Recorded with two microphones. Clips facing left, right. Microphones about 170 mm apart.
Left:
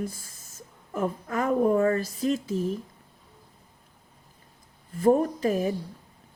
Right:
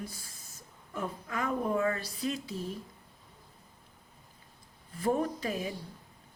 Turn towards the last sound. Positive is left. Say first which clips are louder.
# left 7 dB
turn(degrees=40)  # may be behind; listen again after turning